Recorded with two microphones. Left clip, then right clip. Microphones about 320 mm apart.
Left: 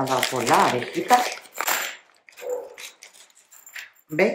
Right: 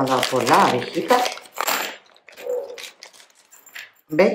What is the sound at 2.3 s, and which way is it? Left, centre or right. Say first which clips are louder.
Dog: right 4 dB; centre.